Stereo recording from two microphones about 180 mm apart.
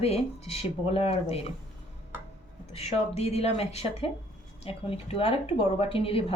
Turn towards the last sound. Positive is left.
turn(degrees=30)  # may be behind; listen again after turning